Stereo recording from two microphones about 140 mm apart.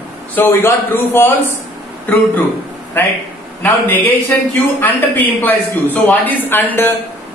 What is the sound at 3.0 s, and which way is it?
Speech, 10° left (ahead or behind).